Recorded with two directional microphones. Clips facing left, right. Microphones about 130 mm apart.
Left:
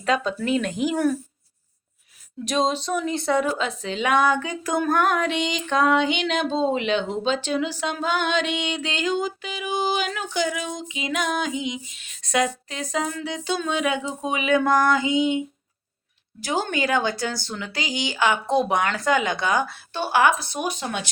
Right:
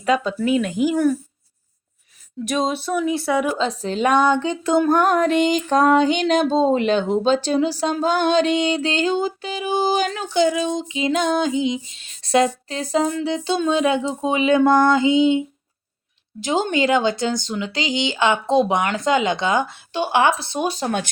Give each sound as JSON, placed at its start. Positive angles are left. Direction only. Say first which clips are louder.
{"t": 0.0, "sound": "speech", "louder": "right 4 dB", "side_deg": -10}
{"t": 2.4, "sound": "speech", "louder": "right 1 dB", "side_deg": -5}
{"t": 3.6, "sound": "music", "louder": "right 5 dB", "side_deg": -35}
{"t": 4.2, "sound": "music", "louder": "right 4 dB", "side_deg": -25}
{"t": 16.4, "sound": "speech", "louder": "right 5 dB", "side_deg": -20}